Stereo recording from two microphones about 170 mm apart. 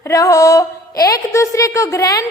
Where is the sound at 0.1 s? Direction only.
20° left (ahead or behind).